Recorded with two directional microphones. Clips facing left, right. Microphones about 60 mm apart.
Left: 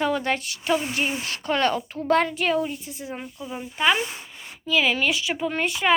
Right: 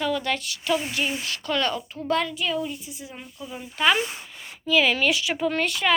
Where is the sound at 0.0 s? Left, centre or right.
Left.